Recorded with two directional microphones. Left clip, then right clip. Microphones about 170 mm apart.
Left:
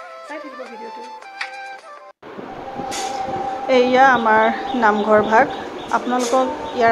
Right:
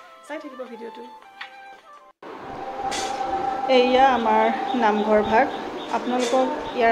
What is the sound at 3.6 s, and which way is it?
Speech, 25° left (ahead or behind).